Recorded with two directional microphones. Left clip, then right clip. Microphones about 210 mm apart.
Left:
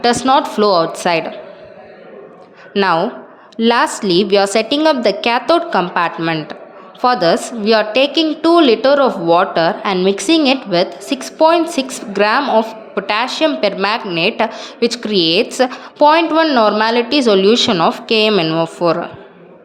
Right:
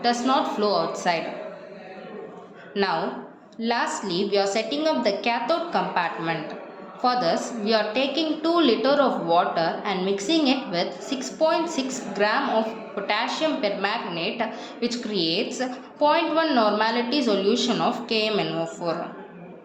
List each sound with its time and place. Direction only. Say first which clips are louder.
0.0 s a woman's voice: left 10 dB; 50° left (ahead or behind)
2.7 s a woman's voice: left 10 dB; 50° left (ahead or behind)